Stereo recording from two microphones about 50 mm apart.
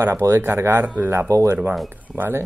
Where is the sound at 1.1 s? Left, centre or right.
Right.